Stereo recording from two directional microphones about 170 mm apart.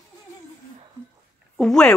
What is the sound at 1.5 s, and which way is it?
Speech, centre (ahead or behind).